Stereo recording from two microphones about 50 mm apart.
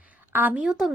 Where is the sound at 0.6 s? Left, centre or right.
Centre.